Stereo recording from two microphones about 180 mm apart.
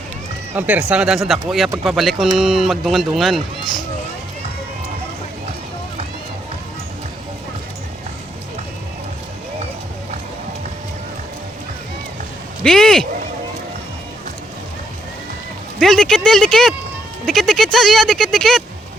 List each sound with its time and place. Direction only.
0.5 s speech: 5° right (ahead or behind)
12.6 s speech: 5° left (ahead or behind)
15.8 s speech: centre (ahead or behind)